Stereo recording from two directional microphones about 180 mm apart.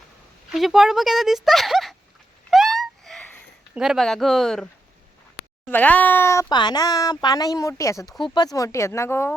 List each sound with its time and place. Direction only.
0.5 s speech: centre (ahead or behind)
1.5 s a sound: centre (ahead or behind)
2.5 s gasp: centre (ahead or behind)
3.8 s speech: centre (ahead or behind)
5.7 s speech: 10° left (ahead or behind)